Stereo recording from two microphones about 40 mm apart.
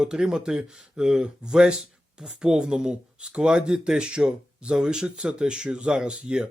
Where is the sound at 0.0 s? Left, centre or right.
Centre.